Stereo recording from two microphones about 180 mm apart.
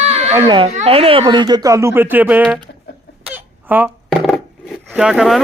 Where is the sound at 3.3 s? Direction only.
10° right (ahead or behind).